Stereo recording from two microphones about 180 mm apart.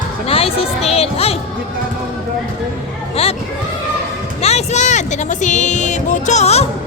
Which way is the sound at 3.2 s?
35° left (ahead or behind).